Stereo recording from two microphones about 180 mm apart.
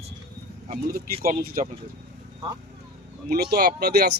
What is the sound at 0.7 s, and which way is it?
Speech, 55° right (ahead or behind).